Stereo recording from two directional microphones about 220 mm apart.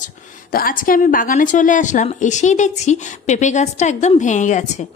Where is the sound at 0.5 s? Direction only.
40° left (ahead or behind).